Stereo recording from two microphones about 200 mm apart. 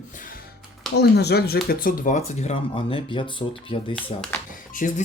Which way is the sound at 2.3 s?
30° left (ahead or behind).